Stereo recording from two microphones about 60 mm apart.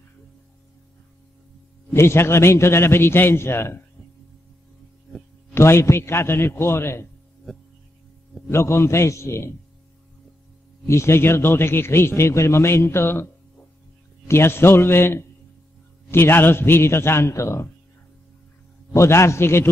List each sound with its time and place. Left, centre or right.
2.0 s a man's voice: left
5.5 s a man's voice: left
8.5 s a man's voice: left
10.9 s a man's voice: left
18.9 s a man's voice: left